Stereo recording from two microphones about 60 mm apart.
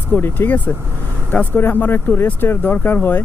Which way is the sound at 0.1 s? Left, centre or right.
Left.